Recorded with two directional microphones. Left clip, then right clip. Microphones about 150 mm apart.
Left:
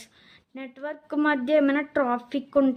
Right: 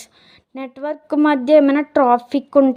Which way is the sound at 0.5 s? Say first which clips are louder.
Right 9 dB; 35° right (ahead or behind).